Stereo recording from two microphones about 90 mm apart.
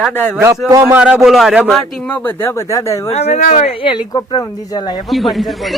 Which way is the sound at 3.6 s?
80° left.